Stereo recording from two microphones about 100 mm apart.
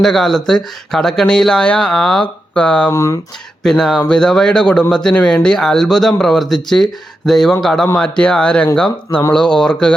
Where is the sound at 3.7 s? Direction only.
5° left (ahead or behind).